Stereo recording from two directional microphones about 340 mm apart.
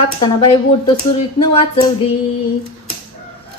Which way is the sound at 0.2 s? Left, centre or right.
Centre.